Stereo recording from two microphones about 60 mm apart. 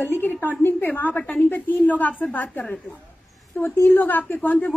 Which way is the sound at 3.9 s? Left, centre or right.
Left.